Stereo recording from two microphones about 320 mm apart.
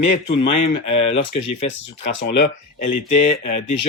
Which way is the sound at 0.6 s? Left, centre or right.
Left.